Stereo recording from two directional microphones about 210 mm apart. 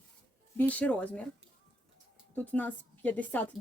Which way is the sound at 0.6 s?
5° left (ahead or behind).